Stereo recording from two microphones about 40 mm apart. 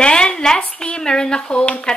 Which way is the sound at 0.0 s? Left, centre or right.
Left.